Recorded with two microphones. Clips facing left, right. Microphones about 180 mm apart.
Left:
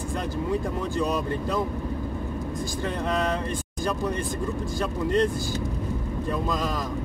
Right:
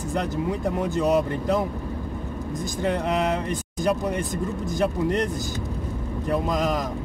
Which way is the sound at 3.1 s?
20° right (ahead or behind).